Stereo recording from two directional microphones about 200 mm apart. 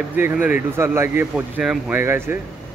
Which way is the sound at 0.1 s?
10° right (ahead or behind).